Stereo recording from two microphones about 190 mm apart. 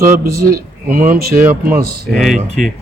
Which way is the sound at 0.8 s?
45° right (ahead or behind).